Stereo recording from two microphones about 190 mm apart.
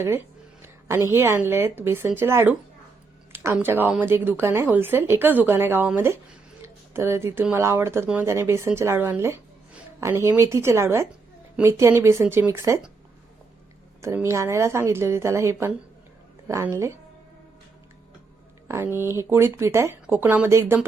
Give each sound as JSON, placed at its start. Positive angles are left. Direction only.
{"t": 0.6, "sound": "a woman's voice", "side_deg": -15}
{"t": 14.0, "sound": "a woman's voice", "side_deg": -15}
{"t": 18.7, "sound": "a woman's voice", "side_deg": -15}